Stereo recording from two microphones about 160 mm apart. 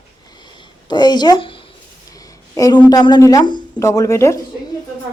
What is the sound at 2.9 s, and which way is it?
A woman's voice, 25° left (ahead or behind).